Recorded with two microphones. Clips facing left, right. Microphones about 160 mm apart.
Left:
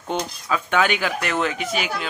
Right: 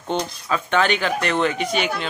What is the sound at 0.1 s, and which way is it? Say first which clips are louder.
Speech: right 1 dB; 5° left (ahead or behind).